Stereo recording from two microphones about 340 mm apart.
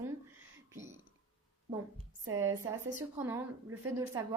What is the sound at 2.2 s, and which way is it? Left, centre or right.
A woman's voice, centre.